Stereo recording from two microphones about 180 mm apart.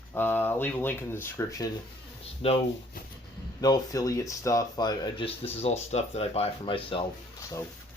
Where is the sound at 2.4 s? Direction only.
30° left (ahead or behind).